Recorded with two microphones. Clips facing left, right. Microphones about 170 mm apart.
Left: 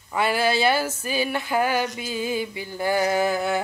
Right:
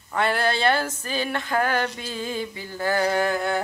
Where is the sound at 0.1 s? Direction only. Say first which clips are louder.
Left 1 dB; 5° left (ahead or behind).